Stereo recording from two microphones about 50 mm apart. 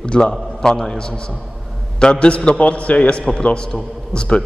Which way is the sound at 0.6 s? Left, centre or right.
Centre.